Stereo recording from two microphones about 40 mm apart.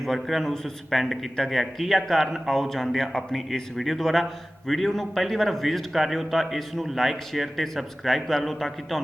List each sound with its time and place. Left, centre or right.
0.0 s speech: centre